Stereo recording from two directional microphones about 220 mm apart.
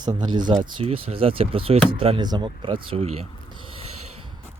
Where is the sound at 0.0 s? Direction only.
20° right (ahead or behind).